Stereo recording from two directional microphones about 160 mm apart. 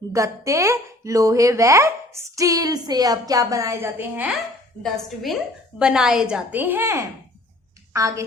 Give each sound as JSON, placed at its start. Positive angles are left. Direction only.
{"t": 0.1, "sound": "a woman's voice", "side_deg": -20}
{"t": 4.8, "sound": "a woman's voice", "side_deg": 0}